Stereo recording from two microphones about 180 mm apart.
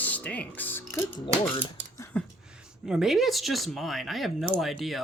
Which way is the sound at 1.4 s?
10° left (ahead or behind).